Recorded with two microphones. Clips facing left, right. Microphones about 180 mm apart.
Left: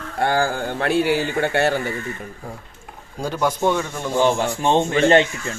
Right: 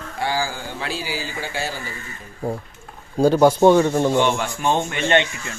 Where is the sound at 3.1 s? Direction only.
35° right (ahead or behind).